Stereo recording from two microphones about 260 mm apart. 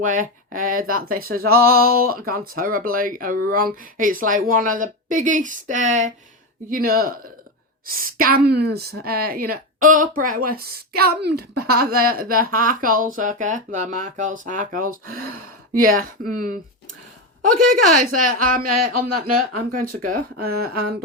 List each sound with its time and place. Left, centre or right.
0.0 s a woman's voice: right
17.7 s a woman's voice: right